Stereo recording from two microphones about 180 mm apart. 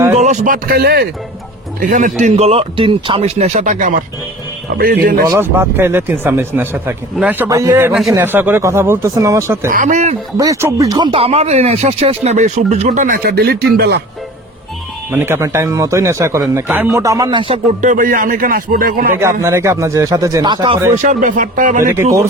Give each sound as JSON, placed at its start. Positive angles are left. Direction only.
{"t": 0.1, "sound": "speech", "side_deg": -40}
{"t": 1.8, "sound": "a man's voice", "side_deg": -50}
{"t": 5.3, "sound": "a man's voice", "side_deg": -10}
{"t": 9.6, "sound": "a man's voice", "side_deg": -45}
{"t": 10.3, "sound": "speech", "side_deg": -20}
{"t": 13.2, "sound": "speech", "side_deg": -60}
{"t": 15.1, "sound": "a man's voice", "side_deg": -10}
{"t": 17.7, "sound": "a man's voice", "side_deg": -45}
{"t": 19.4, "sound": "a man's voice", "side_deg": -15}
{"t": 20.9, "sound": "a man's voice", "side_deg": -45}